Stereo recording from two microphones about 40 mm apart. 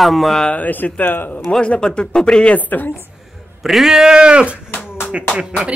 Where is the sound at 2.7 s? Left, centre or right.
Left.